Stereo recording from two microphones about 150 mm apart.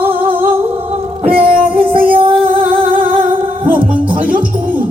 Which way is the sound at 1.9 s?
35° right (ahead or behind).